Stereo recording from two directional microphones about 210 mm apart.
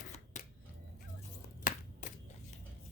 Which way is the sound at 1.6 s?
40° left (ahead or behind).